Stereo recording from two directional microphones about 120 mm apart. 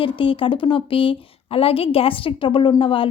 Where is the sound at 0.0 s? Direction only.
45° left (ahead or behind).